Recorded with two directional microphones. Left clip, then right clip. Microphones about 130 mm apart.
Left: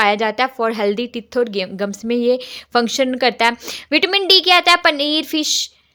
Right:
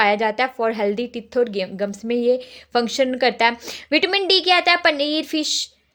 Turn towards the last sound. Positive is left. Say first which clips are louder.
# left 4 dB
turn(degrees=20)  # may be behind; listen again after turning